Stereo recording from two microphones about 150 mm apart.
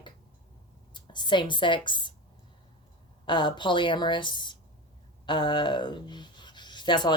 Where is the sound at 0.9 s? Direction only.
30° left (ahead or behind).